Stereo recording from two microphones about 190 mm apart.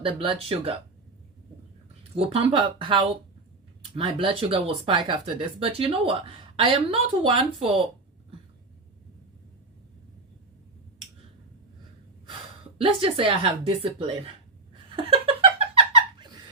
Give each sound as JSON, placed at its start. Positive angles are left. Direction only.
{"t": 0.0, "sound": "speech", "side_deg": -30}
{"t": 2.1, "sound": "speech", "side_deg": -30}
{"t": 12.8, "sound": "speech", "side_deg": -30}
{"t": 14.9, "sound": "a sound", "side_deg": -30}